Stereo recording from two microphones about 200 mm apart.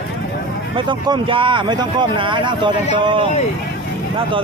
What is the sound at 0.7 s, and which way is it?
Speech, 25° right (ahead or behind).